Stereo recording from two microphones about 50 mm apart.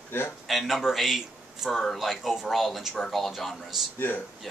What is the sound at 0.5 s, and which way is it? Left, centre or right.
Speech, centre.